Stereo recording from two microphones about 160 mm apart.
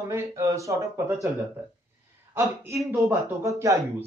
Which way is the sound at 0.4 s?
20° right (ahead or behind).